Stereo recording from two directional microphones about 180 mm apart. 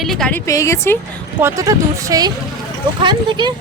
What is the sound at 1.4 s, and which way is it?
Speech, 15° right (ahead or behind).